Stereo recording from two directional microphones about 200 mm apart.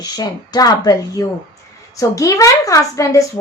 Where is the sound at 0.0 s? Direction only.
20° left (ahead or behind).